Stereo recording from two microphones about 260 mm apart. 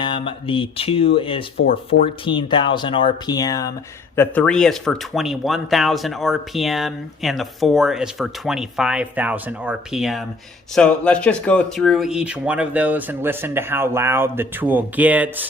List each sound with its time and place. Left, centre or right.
0.0 s speech: centre